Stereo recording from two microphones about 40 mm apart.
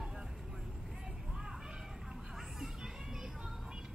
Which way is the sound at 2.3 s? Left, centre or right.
Centre.